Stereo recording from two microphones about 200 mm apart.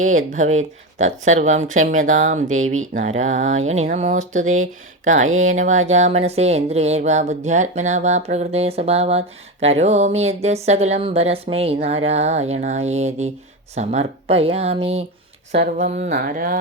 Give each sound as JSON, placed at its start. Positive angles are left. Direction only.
{"t": 0.0, "sound": "speech", "side_deg": -40}
{"t": 5.3, "sound": "speech", "side_deg": -90}
{"t": 5.5, "sound": "speech", "side_deg": -35}
{"t": 15.5, "sound": "speech", "side_deg": -55}
{"t": 16.0, "sound": "a sound", "side_deg": -45}